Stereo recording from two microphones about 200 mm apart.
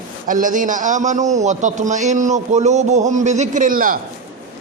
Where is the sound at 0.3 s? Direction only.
40° right (ahead or behind).